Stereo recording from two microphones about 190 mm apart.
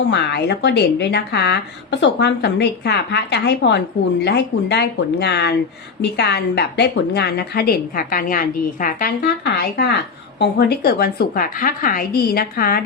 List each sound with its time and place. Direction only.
0.1 s a woman's voice: 65° left (ahead or behind)